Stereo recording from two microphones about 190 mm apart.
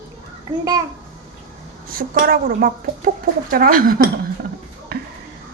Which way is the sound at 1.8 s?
50° right (ahead or behind).